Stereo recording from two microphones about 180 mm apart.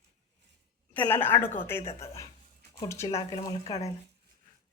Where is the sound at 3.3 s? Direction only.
25° left (ahead or behind).